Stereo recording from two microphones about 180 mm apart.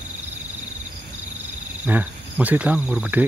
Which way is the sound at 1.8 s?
10° right (ahead or behind).